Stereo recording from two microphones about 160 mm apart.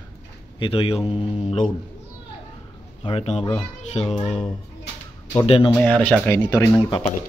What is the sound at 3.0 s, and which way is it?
Speech, 35° left (ahead or behind).